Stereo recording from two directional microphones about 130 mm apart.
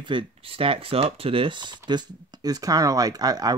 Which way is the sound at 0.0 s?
35° right (ahead or behind).